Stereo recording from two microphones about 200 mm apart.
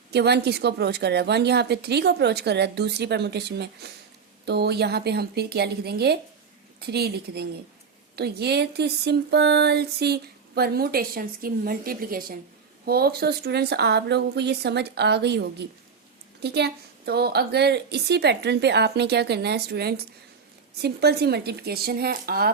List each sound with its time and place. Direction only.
0.1 s a woman's voice: 55° right (ahead or behind)